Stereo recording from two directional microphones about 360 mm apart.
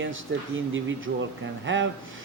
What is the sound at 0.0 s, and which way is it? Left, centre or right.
A man's voice, right.